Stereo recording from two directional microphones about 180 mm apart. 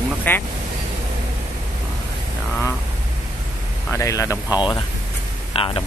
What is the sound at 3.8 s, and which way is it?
Speech, 15° left (ahead or behind).